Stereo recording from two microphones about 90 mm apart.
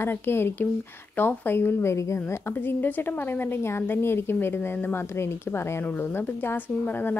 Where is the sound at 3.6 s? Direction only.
25° left (ahead or behind).